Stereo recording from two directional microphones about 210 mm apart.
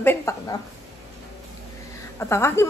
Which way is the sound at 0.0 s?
10° left (ahead or behind).